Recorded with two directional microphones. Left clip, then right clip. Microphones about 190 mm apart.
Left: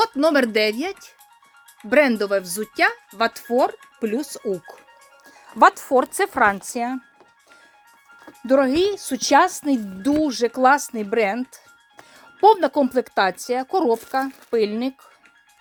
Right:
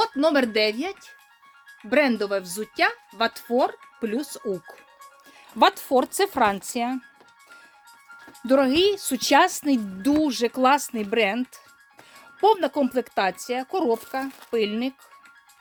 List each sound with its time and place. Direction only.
0.0 s speech: 30° left (ahead or behind)
5.5 s a woman's voice: 5° left (ahead or behind)
8.4 s a woman's voice: 5° left (ahead or behind)
12.4 s speech: 20° left (ahead or behind)